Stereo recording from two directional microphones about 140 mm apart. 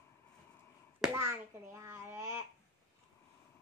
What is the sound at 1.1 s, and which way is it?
A child's voice, 20° right (ahead or behind).